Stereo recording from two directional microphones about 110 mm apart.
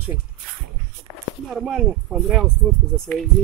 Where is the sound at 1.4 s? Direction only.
Centre (ahead or behind).